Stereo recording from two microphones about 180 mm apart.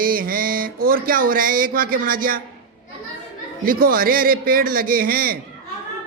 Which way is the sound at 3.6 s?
55° right (ahead or behind).